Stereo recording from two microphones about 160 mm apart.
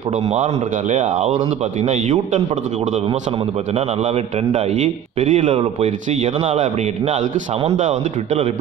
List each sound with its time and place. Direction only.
0.3 s a man's voice: 45° right (ahead or behind)
3.7 s a man's voice: 40° right (ahead or behind)
5.2 s a man's voice: 50° right (ahead or behind)
7.6 s a man's voice: 50° right (ahead or behind)